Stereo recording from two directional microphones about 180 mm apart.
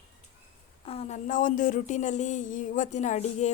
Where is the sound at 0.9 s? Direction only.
35° left (ahead or behind).